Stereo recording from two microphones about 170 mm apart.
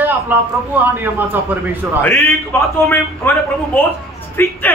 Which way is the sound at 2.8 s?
15° left (ahead or behind).